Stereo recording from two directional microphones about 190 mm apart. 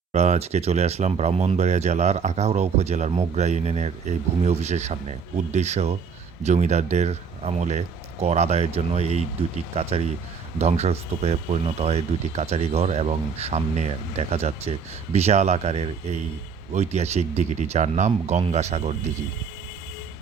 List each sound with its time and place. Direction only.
0.1 s speech: 35° right (ahead or behind)
10.6 s speech: 35° right (ahead or behind)